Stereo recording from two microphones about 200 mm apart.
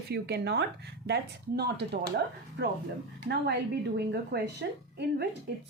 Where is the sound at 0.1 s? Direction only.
55° right (ahead or behind).